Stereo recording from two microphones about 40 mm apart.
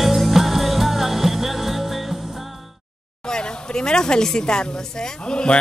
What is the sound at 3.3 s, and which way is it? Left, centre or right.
A woman's voice, centre.